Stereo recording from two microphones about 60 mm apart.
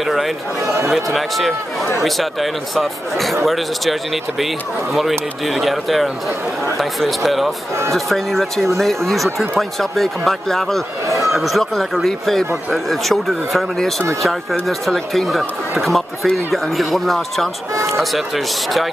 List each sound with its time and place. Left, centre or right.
0.0 s chatter: centre
0.9 s speech: centre
5.5 s speech: centre